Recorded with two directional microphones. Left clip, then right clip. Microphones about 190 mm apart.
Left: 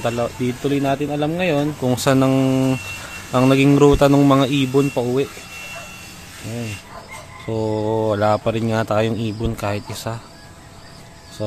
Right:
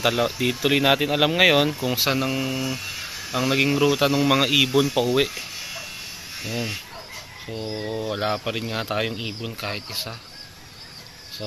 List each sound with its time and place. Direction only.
0.0 s speech: 5° left (ahead or behind)
1.9 s speech: 30° left (ahead or behind); by 5.0 s 15° left (ahead or behind)
7.5 s speech: 35° left (ahead or behind)